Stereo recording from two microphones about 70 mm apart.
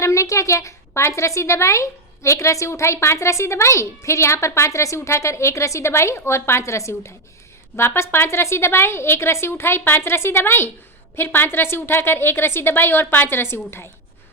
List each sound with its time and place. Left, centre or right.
0.0 s a woman's voice: left